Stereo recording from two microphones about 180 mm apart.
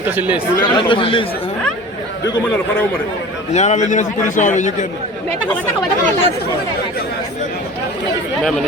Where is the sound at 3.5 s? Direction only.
40° left (ahead or behind).